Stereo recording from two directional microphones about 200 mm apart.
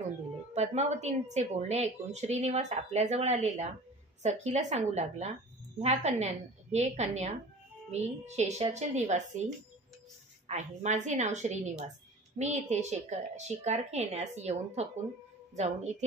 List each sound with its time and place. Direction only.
0.6 s a woman's voice: 35° right (ahead or behind)
10.5 s a woman's voice: 35° right (ahead or behind)